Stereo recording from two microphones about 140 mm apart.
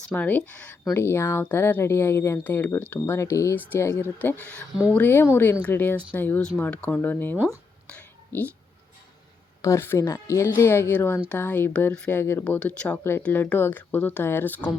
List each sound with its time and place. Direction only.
0.1 s speech: 10° left (ahead or behind)
7.9 s whispering: 10° left (ahead or behind)
9.6 s speech: 20° left (ahead or behind)
12.5 s speech: 10° left (ahead or behind)